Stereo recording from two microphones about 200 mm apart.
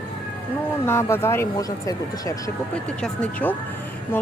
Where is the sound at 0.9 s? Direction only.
10° left (ahead or behind).